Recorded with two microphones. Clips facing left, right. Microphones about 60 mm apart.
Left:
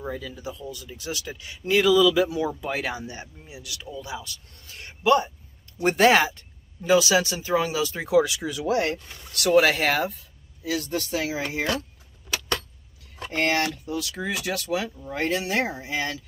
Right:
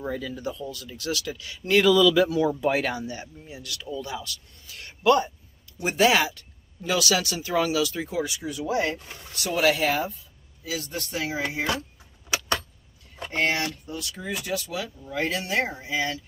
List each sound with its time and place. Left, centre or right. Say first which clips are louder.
0.0 s speech: right 2 dB; centre
0.7 s speech: right 2 dB; centre
1.7 s speech: even; centre
2.2 s speech: right 3 dB; centre
2.6 s speech: right 5 dB; centre
2.9 s speech: right 2 dB; left
5.8 s speech: left 3 dB; left
6.9 s speech: left 5 dB; left
8.1 s speech: left 8 dB; left
9.3 s speech: left 4 dB; left
12.3 s keys jangling: right 1 dB; centre
13.4 s speech: left 2 dB; left
14.7 s speech: left 5 dB; left